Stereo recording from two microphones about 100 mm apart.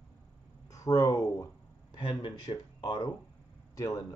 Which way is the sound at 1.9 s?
50° left (ahead or behind).